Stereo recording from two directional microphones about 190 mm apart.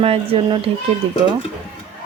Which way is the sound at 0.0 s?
30° right (ahead or behind).